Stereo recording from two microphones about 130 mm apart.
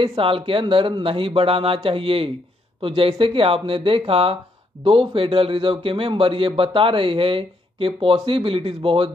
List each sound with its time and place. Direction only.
0.0 s a man's voice: 45° right (ahead or behind)